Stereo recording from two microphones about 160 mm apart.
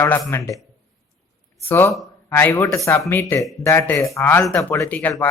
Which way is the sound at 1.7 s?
15° left (ahead or behind).